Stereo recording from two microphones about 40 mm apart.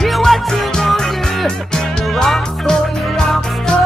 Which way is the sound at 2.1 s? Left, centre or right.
Centre.